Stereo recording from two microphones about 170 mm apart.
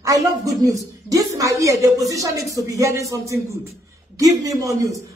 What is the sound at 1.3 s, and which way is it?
A man's voice, 20° right (ahead or behind).